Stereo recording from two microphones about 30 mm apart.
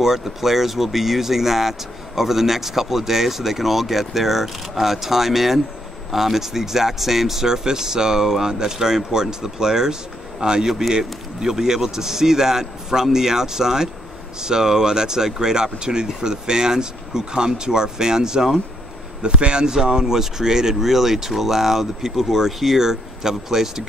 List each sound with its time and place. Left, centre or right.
0.0 s speech: centre; by 10.7 s right
10.7 s speech: centre